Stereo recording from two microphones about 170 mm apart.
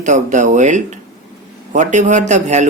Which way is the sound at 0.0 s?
45° right (ahead or behind).